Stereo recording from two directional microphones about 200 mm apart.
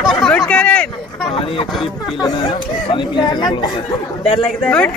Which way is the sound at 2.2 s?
25° left (ahead or behind).